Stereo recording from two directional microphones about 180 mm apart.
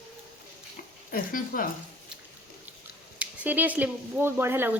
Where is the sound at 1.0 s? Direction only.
50° left (ahead or behind).